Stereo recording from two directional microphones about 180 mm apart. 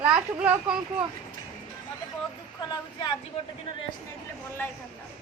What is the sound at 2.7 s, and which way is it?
Speech, 25° left (ahead or behind).